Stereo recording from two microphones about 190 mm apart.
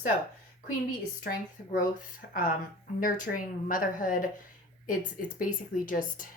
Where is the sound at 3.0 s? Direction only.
45° left (ahead or behind).